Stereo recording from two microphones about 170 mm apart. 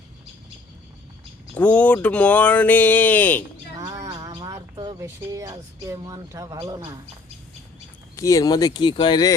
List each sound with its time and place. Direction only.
1.5 s speech: 10° left (ahead or behind)
3.8 s speech: 20° right (ahead or behind)
8.1 s speech: 20° left (ahead or behind)